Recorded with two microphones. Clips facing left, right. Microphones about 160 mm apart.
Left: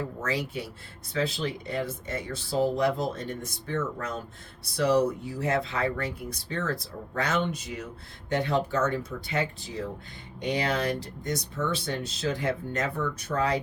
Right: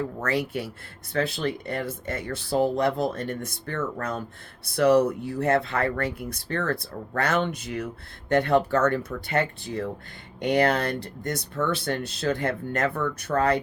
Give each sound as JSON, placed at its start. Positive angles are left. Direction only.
{"t": 0.2, "sound": "speech", "side_deg": -60}